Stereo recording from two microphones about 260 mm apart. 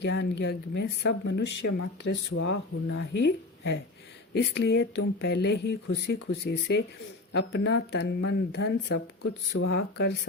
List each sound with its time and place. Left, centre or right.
0.0 s speech: left
2.3 s speech: left